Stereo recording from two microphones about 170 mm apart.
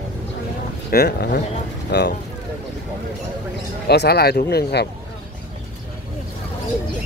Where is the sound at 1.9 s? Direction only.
80° left.